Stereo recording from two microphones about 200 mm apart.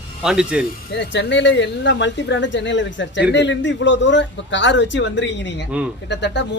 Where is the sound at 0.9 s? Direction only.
60° left (ahead or behind).